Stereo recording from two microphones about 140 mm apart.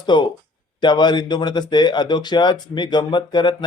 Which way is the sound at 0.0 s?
30° left (ahead or behind).